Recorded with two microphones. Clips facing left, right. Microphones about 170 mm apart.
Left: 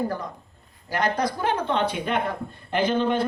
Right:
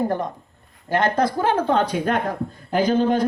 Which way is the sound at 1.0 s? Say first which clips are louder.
Right 3 dB; 50° right (ahead or behind).